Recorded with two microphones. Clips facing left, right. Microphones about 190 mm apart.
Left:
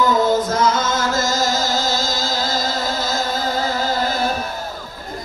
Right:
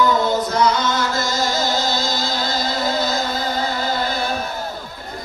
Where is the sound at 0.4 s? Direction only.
45° left (ahead or behind).